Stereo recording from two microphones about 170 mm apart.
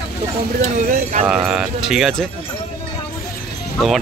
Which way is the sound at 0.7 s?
50° right (ahead or behind).